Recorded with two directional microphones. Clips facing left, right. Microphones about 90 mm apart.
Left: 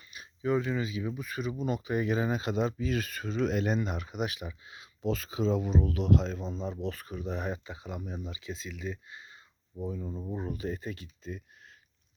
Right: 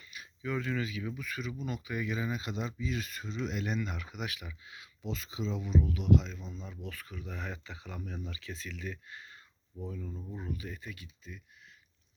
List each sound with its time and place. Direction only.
0.0 s a sound: 30° left (ahead or behind)
0.6 s speech: 20° left (ahead or behind)
5.0 s speech: 50° left (ahead or behind); by 10.2 s 20° left (ahead or behind)
10.3 s speech: 35° left (ahead or behind)